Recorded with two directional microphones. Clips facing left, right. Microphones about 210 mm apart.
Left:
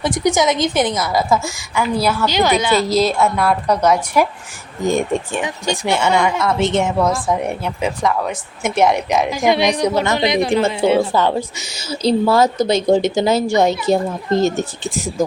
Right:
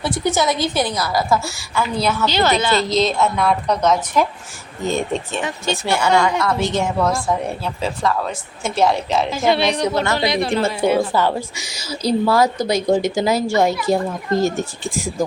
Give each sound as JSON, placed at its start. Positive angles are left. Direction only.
{"t": 0.0, "sound": "a woman's voice", "side_deg": 15}